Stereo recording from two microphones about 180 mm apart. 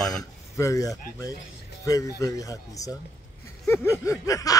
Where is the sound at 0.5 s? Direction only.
15° left (ahead or behind).